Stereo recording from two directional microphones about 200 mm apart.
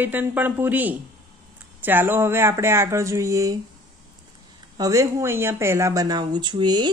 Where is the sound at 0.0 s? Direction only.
10° right (ahead or behind).